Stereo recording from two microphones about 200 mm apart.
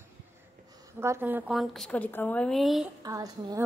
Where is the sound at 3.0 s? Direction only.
15° right (ahead or behind).